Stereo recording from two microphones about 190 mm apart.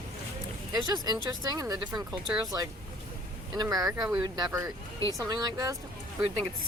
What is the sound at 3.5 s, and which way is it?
Speech, 20° right (ahead or behind).